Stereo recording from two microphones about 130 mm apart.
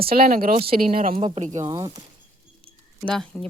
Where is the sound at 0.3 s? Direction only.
90° right.